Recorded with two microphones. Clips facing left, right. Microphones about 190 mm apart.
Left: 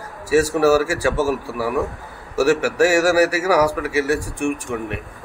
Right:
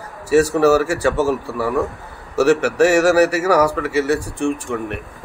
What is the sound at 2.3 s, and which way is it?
Speech, 20° right (ahead or behind).